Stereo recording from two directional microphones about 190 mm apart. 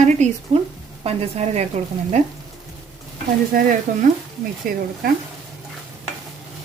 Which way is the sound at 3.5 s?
50° right (ahead or behind).